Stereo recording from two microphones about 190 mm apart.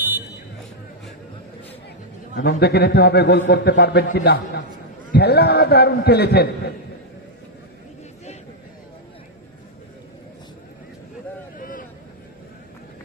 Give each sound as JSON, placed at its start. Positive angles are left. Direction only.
{"t": 2.3, "sound": "a man's voice", "side_deg": 60}
{"t": 11.5, "sound": "vehicle", "side_deg": 45}